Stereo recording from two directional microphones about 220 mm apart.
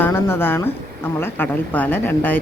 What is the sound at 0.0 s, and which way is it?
A woman's voice, 10° left (ahead or behind).